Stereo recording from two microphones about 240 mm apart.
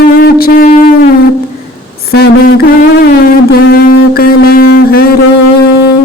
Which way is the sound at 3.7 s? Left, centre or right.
Left.